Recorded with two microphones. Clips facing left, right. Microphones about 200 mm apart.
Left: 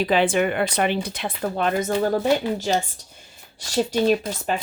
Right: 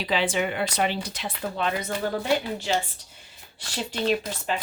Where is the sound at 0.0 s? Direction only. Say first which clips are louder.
Left 6 dB; 50° left (ahead or behind).